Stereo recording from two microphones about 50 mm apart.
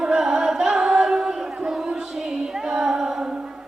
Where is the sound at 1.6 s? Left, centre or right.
Centre.